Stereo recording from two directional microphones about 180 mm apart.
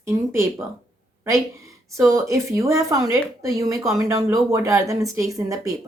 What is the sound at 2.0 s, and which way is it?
A woman's voice, 15° right (ahead or behind).